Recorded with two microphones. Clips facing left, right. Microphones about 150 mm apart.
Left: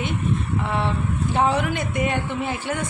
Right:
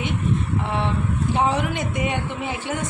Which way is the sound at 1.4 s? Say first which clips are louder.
Left 2 dB; 15° right (ahead or behind).